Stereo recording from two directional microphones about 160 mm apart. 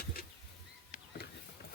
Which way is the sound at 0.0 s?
70° left (ahead or behind).